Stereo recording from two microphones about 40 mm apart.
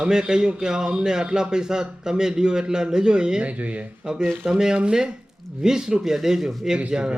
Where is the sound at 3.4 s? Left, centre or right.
Right.